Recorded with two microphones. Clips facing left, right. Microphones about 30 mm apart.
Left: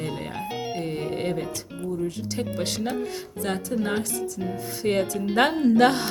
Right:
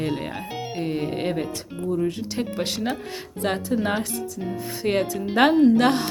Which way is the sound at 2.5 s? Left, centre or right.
Centre.